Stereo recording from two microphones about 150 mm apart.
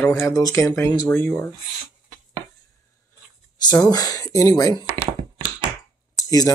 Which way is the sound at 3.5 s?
25° left (ahead or behind).